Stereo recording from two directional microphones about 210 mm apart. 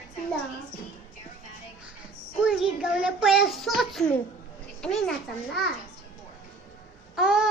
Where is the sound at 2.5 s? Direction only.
5° right (ahead or behind).